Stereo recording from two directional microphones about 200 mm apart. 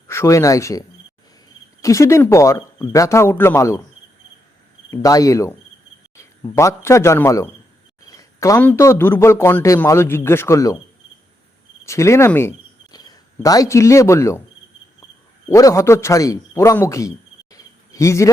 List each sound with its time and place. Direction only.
0.1 s a man's voice: 15° left (ahead or behind)
4.9 s a man's voice: 15° left (ahead or behind)
11.9 s speech: 15° left (ahead or behind)
15.4 s a man's voice: 15° left (ahead or behind)
17.5 s a sound: 15° left (ahead or behind)